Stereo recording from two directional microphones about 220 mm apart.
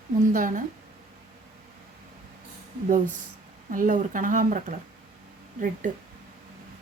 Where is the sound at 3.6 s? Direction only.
40° right (ahead or behind).